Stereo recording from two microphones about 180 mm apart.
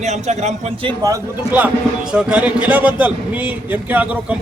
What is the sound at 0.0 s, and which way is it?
A man's voice, 40° right (ahead or behind).